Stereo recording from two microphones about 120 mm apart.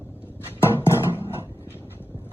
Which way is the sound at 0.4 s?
20° left (ahead or behind).